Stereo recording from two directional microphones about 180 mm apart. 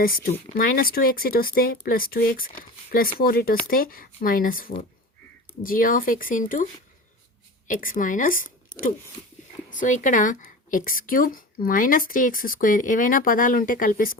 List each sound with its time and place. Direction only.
0.0 s a woman's voice: 55° left (ahead or behind)
7.7 s a woman's voice: 50° left (ahead or behind)
9.6 s a woman's voice: 45° left (ahead or behind)